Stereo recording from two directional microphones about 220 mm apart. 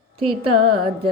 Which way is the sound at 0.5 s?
20° right (ahead or behind).